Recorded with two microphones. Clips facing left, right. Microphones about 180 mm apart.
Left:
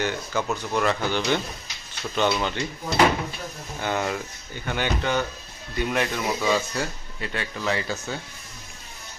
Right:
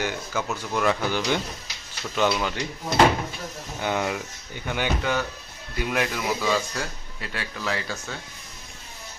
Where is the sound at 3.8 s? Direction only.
15° right (ahead or behind).